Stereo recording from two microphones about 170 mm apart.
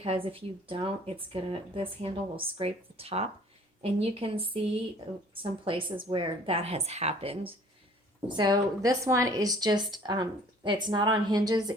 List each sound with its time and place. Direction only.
0.0 s speech: 35° right (ahead or behind)
8.4 s speech: 20° right (ahead or behind)